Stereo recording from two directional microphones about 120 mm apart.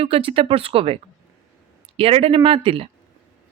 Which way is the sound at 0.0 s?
50° right (ahead or behind).